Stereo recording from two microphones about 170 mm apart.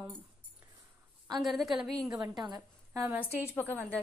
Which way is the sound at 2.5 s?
20° right (ahead or behind).